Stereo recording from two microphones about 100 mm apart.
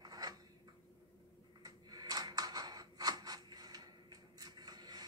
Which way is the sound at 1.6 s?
40° right (ahead or behind).